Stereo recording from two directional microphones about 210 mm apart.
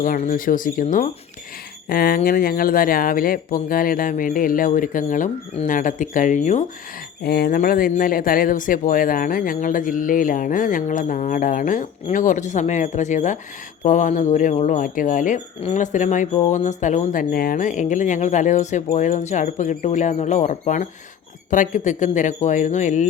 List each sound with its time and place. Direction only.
0.0 s speech: 40° left (ahead or behind)
7.2 s speech: 45° left (ahead or behind)